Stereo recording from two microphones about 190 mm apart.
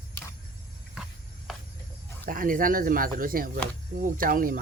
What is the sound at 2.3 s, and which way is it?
Speech, 45° right (ahead or behind).